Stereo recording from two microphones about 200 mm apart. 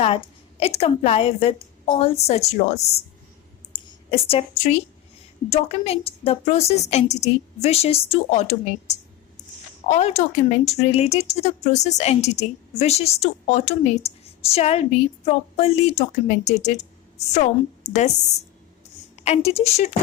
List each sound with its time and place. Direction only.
0.0 s a woman's voice: 30° left (ahead or behind)
3.7 s a sound: 30° left (ahead or behind)
5.5 s speech: 30° left (ahead or behind)